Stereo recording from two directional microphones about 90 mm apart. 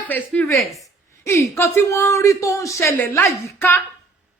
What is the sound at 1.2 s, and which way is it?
Speech, 30° left (ahead or behind).